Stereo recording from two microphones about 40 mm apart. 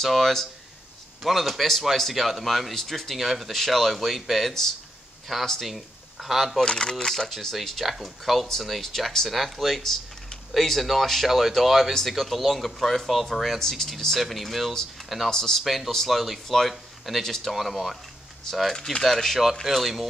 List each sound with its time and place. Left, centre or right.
0.0 s speech: centre
6.6 s speech: left; by 14.7 s centre
15.2 s speech: centre
15.6 s speech: centre
15.9 s speech: centre
17.5 s speech: centre
18.8 s speech: centre
19.0 s speech: centre